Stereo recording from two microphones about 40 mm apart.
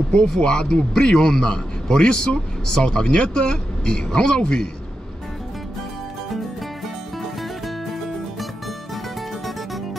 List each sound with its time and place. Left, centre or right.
0.3 s a man's voice: centre